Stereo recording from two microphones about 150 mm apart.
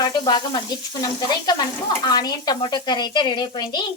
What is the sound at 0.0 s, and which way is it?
Speech, 30° left (ahead or behind).